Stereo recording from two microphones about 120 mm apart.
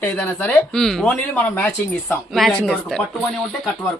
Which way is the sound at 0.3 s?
5° left (ahead or behind).